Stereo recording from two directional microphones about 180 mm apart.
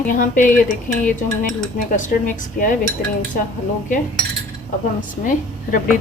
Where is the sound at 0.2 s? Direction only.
45° left (ahead or behind).